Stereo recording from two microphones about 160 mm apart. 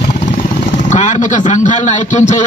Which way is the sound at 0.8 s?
50° left (ahead or behind).